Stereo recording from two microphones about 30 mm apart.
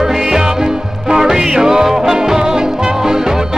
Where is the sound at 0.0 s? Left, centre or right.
Centre.